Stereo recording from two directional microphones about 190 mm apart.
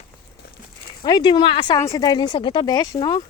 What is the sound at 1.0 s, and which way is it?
Speech, 20° left (ahead or behind).